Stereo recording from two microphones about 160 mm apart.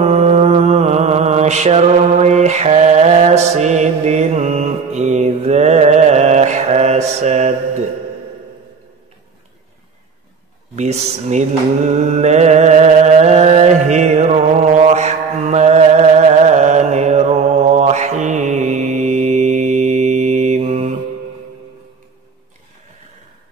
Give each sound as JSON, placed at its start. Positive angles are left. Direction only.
{"t": 0.0, "sound": "mantra", "side_deg": -45}
{"t": 10.8, "sound": "speech", "side_deg": -45}
{"t": 12.0, "sound": "mantra", "side_deg": -45}